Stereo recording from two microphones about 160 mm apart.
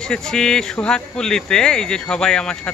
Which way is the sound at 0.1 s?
5° left (ahead or behind).